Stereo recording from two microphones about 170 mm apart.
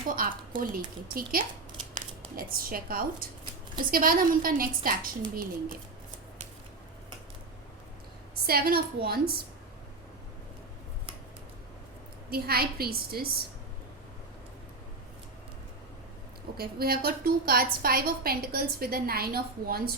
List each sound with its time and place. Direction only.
0.1 s a woman's voice: 55° right (ahead or behind)
8.4 s a woman's voice: 65° right (ahead or behind)
12.3 s a woman's voice: 65° right (ahead or behind)
16.6 s a woman's voice: 65° right (ahead or behind)